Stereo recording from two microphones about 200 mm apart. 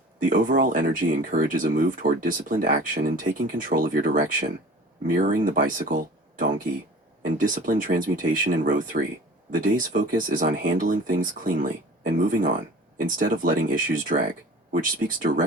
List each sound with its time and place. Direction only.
0.2 s speech: 45° right (ahead or behind)
7.3 s speech: 45° right (ahead or behind)